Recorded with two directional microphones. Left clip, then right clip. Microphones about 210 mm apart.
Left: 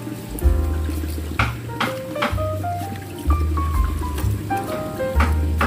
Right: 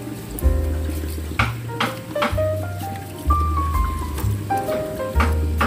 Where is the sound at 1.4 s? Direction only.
50° right (ahead or behind).